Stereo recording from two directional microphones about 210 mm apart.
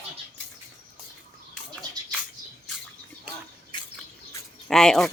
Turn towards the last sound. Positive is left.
turn(degrees=5)  # may be behind; listen again after turning